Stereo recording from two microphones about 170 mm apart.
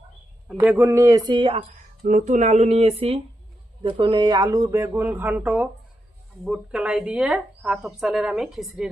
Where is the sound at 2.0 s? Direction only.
50° right (ahead or behind).